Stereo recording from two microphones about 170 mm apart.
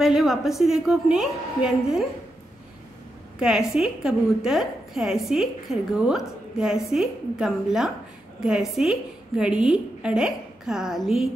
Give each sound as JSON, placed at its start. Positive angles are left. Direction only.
{"t": 0.0, "sound": "a woman's voice", "side_deg": 0}
{"t": 3.3, "sound": "a woman's voice", "side_deg": -5}